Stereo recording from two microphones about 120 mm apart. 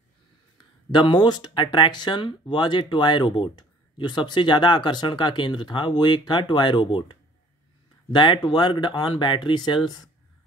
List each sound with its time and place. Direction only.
0.9 s speech: 40° left (ahead or behind)